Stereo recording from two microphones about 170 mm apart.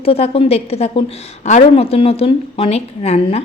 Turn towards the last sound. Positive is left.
turn(degrees=40)  # may be behind; listen again after turning